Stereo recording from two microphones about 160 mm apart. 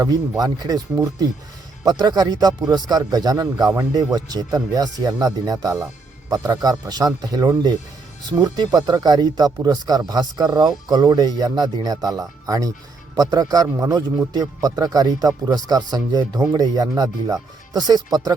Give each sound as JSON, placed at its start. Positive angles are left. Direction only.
{"t": 0.0, "sound": "a man's voice", "side_deg": -25}